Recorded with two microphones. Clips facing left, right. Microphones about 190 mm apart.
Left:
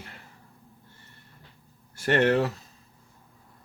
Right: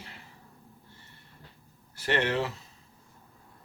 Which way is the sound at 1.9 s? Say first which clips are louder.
Left 6 dB; 50° left (ahead or behind).